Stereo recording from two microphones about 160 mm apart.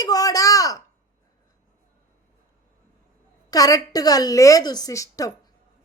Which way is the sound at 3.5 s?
20° left (ahead or behind).